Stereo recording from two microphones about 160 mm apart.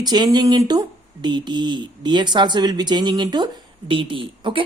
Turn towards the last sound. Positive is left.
turn(degrees=-30)  # may be behind; listen again after turning